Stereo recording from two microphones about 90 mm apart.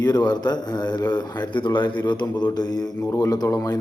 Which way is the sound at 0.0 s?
50° left (ahead or behind).